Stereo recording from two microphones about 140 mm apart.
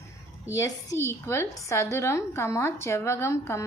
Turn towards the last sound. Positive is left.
turn(degrees=20)  # may be behind; listen again after turning